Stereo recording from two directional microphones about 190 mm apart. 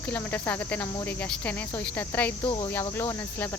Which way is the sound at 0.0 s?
10° left (ahead or behind).